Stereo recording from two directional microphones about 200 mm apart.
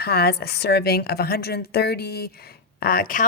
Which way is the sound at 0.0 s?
50° left (ahead or behind).